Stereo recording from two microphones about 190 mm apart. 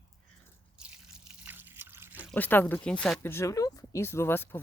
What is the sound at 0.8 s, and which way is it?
Drip, 5° right (ahead or behind).